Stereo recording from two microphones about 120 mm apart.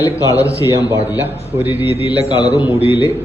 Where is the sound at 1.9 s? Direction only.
50° left (ahead or behind).